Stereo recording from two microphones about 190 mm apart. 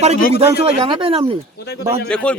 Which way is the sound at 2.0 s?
5° left (ahead or behind).